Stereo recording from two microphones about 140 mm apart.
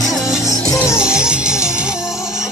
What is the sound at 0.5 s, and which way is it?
Music, 20° left (ahead or behind).